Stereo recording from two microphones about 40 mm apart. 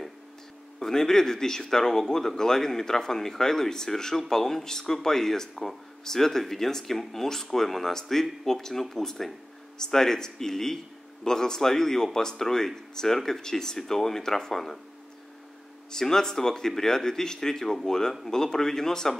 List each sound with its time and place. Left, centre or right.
0.7 s speech: centre
15.9 s speech: centre